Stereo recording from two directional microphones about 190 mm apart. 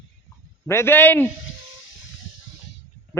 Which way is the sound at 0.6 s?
15° left (ahead or behind).